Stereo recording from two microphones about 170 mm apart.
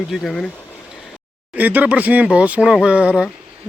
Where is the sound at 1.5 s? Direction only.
10° right (ahead or behind).